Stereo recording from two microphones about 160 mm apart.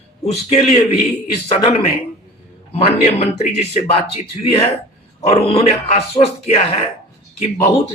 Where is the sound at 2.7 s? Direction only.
40° left (ahead or behind).